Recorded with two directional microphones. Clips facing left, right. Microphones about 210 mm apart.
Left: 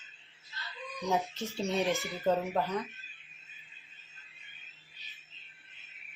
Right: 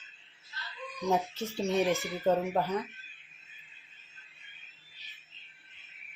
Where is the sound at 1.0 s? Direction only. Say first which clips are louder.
Right 2 dB; centre (ahead or behind).